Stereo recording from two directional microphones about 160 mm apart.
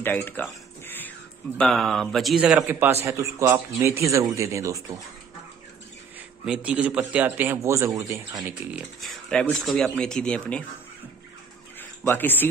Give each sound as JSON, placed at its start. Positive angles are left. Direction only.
{"t": 0.0, "sound": "a sound", "side_deg": 10}
{"t": 1.6, "sound": "speech", "side_deg": 0}
{"t": 6.4, "sound": "a man's voice", "side_deg": -5}
{"t": 9.0, "sound": "speech", "side_deg": 0}
{"t": 11.8, "sound": "speech", "side_deg": 15}